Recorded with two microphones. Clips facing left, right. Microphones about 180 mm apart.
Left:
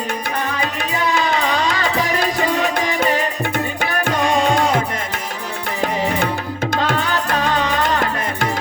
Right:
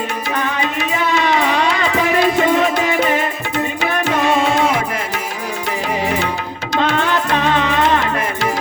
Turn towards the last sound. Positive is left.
turn(degrees=35)  # may be behind; listen again after turning